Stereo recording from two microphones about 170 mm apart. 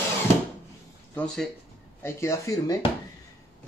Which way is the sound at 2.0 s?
15° left (ahead or behind).